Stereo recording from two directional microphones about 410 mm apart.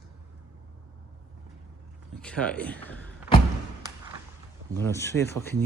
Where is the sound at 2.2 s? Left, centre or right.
Centre.